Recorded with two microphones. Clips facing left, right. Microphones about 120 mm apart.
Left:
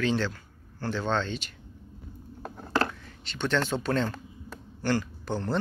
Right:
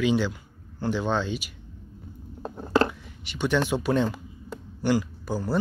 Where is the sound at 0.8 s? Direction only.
15° right (ahead or behind).